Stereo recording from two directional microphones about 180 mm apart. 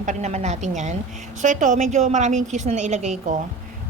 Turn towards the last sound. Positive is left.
turn(degrees=-40)  # may be behind; listen again after turning